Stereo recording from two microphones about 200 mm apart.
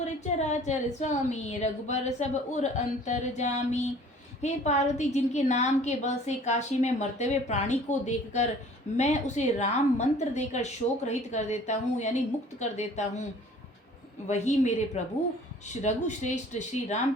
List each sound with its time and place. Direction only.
0.0 s a woman's voice: 35° left (ahead or behind)
14.3 s a woman's voice: 35° left (ahead or behind)